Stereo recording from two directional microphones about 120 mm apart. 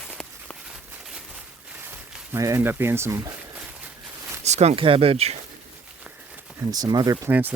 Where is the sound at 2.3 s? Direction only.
20° right (ahead or behind).